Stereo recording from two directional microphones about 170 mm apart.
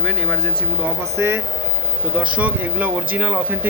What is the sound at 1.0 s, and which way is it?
Speech, 15° right (ahead or behind).